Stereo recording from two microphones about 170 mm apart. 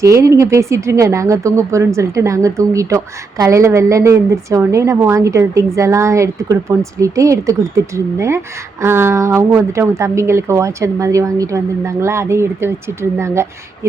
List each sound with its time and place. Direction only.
0.0 s speech: 20° right (ahead or behind)